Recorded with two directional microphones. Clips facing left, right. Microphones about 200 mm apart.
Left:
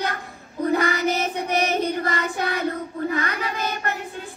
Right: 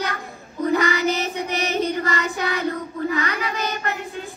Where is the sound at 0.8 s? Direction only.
55° left (ahead or behind).